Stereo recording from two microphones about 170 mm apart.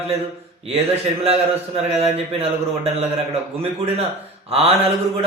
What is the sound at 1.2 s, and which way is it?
Speech, 40° right (ahead or behind).